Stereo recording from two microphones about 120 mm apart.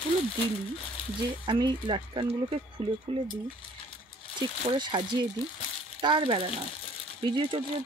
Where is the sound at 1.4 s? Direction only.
40° right (ahead or behind).